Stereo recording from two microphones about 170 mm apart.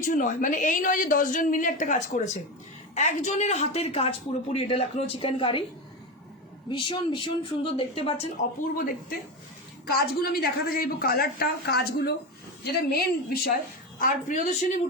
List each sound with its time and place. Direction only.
0.0 s a woman's voice: 50° left (ahead or behind); by 5.6 s 30° left (ahead or behind)
6.7 s speech: 30° left (ahead or behind)
8.8 s a woman's voice: 55° left (ahead or behind)
14.0 s a woman's voice: 50° left (ahead or behind)